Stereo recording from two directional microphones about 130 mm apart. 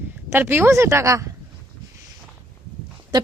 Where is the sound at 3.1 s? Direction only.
35° right (ahead or behind).